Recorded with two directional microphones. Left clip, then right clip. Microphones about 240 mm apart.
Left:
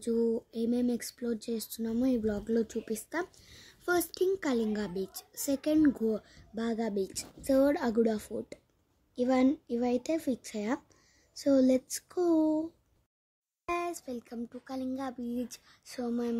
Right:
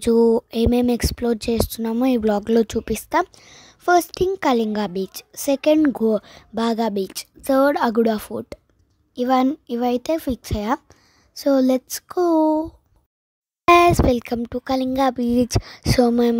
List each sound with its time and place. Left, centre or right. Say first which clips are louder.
0.0 s speech: right 14 dB; right